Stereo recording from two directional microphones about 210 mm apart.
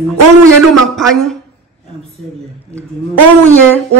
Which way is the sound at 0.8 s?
Centre (ahead or behind).